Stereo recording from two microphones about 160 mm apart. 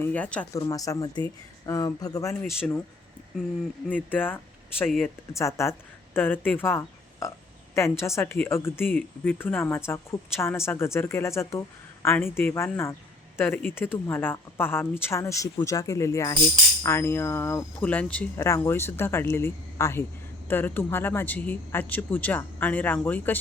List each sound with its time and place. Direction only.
0.0 s speech: 10° left (ahead or behind)
0.7 s speech: 20° left (ahead or behind)
2.4 s speech: centre (ahead or behind)
3.8 s speech: 10° left (ahead or behind)
4.9 s speech: centre (ahead or behind)
5.3 s speech: 20° left (ahead or behind)